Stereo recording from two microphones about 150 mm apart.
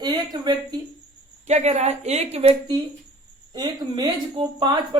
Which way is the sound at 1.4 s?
45° right (ahead or behind).